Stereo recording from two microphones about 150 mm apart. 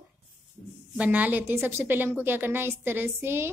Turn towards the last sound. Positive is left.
turn(degrees=-15)  # may be behind; listen again after turning